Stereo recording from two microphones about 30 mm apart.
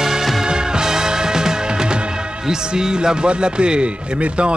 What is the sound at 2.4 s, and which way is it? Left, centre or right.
Speech, right.